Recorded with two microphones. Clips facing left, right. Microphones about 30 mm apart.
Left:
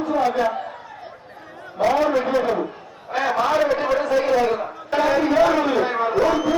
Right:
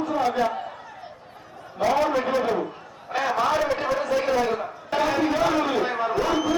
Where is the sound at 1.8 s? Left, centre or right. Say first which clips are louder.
Left 3 dB; centre.